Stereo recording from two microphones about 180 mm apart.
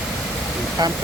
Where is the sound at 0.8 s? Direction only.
20° right (ahead or behind).